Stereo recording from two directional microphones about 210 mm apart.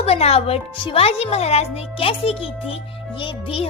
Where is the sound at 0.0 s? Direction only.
30° left (ahead or behind).